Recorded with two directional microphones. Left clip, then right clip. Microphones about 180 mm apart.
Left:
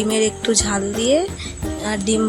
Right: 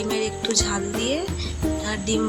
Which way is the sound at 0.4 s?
30° left (ahead or behind).